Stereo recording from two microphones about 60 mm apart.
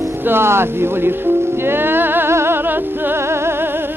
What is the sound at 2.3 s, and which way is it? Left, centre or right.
Music, right.